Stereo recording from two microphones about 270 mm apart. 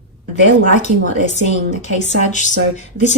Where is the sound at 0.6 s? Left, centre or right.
Left.